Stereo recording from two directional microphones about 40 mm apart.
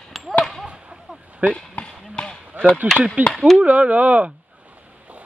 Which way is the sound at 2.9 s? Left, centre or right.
Right.